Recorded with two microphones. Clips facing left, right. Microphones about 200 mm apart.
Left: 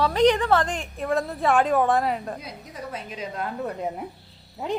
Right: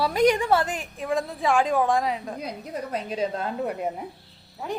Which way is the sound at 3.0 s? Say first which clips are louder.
Right 5 dB; 35° right (ahead or behind).